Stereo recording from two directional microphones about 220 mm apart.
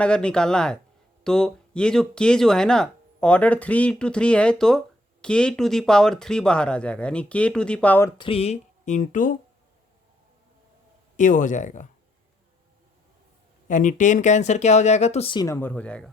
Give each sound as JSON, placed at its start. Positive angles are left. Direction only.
{"t": 0.0, "sound": "speech", "side_deg": 5}
{"t": 8.2, "sound": "speech", "side_deg": 25}
{"t": 11.2, "sound": "speech", "side_deg": 35}
{"t": 13.7, "sound": "speech", "side_deg": 35}